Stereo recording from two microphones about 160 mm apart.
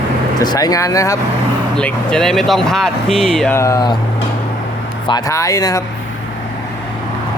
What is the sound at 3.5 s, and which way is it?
Speech, 20° left (ahead or behind).